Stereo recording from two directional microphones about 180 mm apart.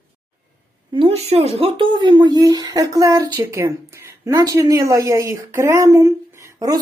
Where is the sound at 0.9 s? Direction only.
30° right (ahead or behind).